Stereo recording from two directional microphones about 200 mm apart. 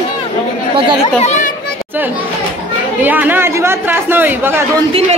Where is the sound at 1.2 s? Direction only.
35° left (ahead or behind).